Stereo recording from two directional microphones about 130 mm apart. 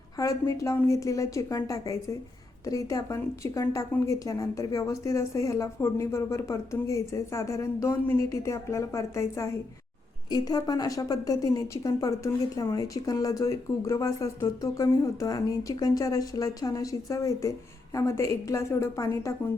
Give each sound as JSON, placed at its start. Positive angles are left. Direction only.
{"t": 0.2, "sound": "a woman's voice", "side_deg": 25}